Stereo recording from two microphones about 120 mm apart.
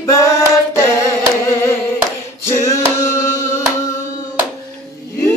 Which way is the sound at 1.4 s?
30° left (ahead or behind).